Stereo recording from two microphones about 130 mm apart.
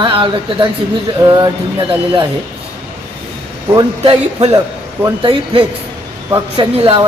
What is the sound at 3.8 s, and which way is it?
Speech, 35° right (ahead or behind).